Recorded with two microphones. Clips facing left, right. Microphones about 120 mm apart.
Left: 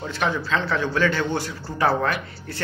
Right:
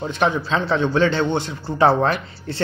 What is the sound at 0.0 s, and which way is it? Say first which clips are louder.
A man's voice: right 4 dB; 20° right (ahead or behind).